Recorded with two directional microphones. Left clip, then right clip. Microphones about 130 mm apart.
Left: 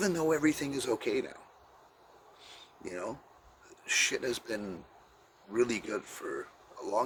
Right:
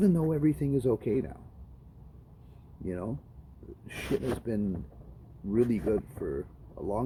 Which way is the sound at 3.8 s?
25° left (ahead or behind).